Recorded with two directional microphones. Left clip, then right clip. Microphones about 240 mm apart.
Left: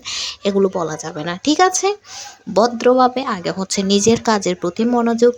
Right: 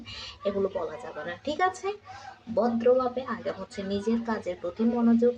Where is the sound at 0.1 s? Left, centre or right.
Left.